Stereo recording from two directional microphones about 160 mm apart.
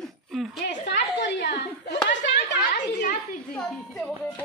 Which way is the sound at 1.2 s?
90° left.